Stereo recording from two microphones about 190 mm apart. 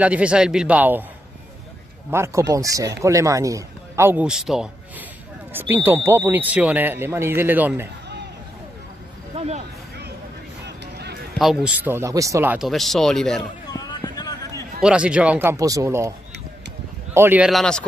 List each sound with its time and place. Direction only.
0.0 s speech: 5° right (ahead or behind)
2.0 s speech: 15° right (ahead or behind)
9.3 s a sound: 35° right (ahead or behind)
11.3 s speech: 5° right (ahead or behind)
13.7 s a sound: 20° left (ahead or behind)
14.8 s speech: 5° right (ahead or behind)
17.1 s speech: 10° right (ahead or behind)